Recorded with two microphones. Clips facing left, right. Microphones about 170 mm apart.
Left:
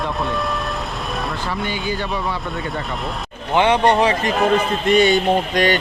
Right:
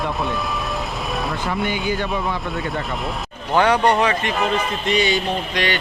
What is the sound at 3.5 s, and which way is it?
Speech, 20° left (ahead or behind).